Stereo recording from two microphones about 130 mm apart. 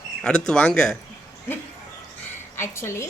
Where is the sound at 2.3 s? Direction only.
15° left (ahead or behind).